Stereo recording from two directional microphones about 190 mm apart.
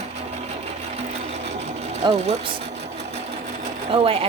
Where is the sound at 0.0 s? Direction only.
35° right (ahead or behind).